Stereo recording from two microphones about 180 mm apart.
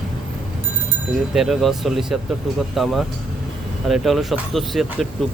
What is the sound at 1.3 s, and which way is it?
Speech, centre (ahead or behind).